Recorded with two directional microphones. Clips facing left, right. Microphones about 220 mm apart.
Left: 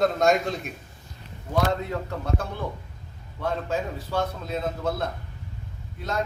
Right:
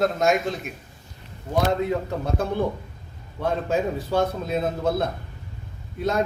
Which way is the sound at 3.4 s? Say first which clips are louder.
Right 4 dB; 15° right (ahead or behind).